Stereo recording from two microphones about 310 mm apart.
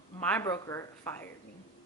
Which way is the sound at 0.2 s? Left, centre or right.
Centre.